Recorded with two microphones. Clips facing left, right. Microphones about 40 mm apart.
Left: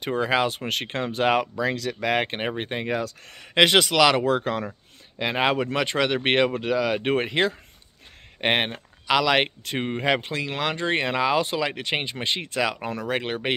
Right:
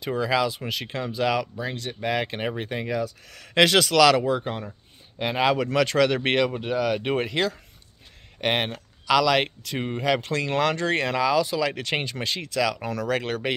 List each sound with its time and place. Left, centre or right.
0.0 s speech: left
0.7 s speech: left
1.6 s speech: left
2.1 s speech: left
3.3 s speech: left
4.3 s speech: left
5.2 s speech: left
5.6 s speech: left
6.3 s speech: left
6.6 s speech: left
9.7 s speech: left
10.2 s speech: centre